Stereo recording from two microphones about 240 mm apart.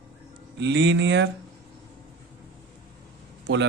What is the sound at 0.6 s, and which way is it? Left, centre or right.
Speech, right.